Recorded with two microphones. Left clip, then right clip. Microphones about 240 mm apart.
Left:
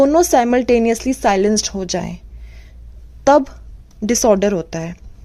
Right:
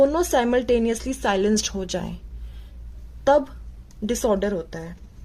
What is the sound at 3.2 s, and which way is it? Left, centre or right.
A woman's voice, left.